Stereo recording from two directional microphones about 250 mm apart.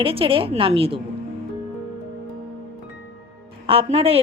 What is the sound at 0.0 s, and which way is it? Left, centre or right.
Speech, right.